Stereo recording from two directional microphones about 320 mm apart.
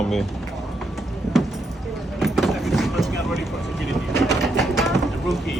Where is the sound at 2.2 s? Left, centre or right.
Centre.